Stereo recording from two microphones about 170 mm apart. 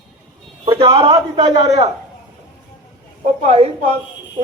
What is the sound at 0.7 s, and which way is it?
Speech, 30° right (ahead or behind).